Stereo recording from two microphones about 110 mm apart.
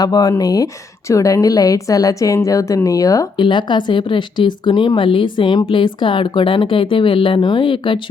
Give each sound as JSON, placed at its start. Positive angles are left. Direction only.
{"t": 0.0, "sound": "a woman's voice", "side_deg": 35}
{"t": 3.3, "sound": "speech", "side_deg": 45}